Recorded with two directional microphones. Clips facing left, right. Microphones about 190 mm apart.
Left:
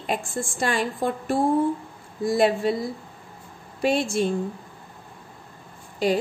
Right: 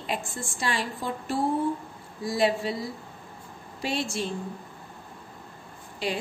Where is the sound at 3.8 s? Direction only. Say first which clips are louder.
Left 7 dB; 55° left (ahead or behind).